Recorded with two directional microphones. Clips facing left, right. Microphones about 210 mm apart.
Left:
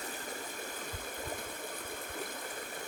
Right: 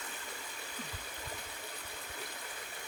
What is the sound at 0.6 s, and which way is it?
Water, 50° left (ahead or behind).